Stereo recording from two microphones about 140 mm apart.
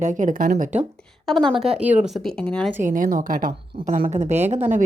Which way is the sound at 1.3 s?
5° left (ahead or behind).